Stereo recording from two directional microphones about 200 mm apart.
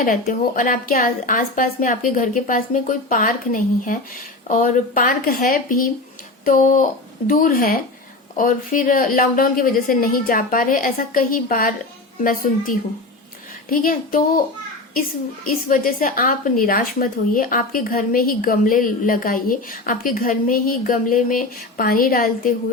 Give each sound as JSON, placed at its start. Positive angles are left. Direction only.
{"t": 0.0, "sound": "a woman's voice", "side_deg": 45}
{"t": 15.4, "sound": "a woman's voice", "side_deg": 45}